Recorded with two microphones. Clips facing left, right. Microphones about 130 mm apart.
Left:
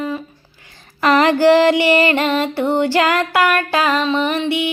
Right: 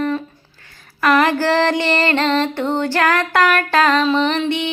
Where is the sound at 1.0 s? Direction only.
25° left (ahead or behind).